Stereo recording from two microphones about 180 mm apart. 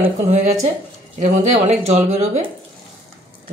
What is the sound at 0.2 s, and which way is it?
Speech, 40° right (ahead or behind).